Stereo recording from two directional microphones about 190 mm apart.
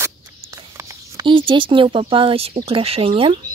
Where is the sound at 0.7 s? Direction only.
15° right (ahead or behind).